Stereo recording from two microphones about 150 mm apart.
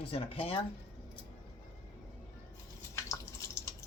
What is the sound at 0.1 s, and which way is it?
Speech, 40° left (ahead or behind).